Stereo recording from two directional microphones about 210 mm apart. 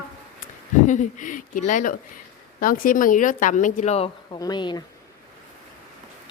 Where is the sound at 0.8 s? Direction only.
35° left (ahead or behind).